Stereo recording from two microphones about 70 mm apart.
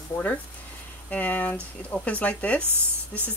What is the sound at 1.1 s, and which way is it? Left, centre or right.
A woman's voice, left.